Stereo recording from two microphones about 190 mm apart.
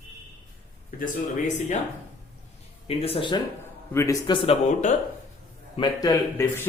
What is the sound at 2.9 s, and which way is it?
Speech, 30° left (ahead or behind).